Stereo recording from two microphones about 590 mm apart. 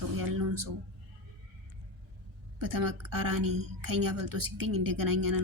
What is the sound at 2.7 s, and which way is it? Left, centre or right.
A woman's voice, right.